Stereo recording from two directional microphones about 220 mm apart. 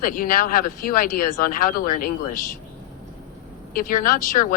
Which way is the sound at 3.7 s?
40° left (ahead or behind).